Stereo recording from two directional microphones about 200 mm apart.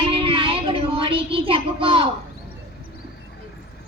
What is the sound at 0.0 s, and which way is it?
Child singing, 25° right (ahead or behind).